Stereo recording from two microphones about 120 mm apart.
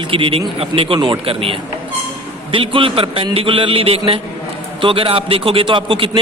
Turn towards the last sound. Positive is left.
turn(degrees=-45)  # may be behind; listen again after turning